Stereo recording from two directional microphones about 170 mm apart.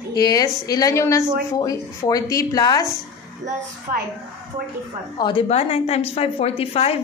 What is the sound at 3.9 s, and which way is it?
Speech, 55° right (ahead or behind).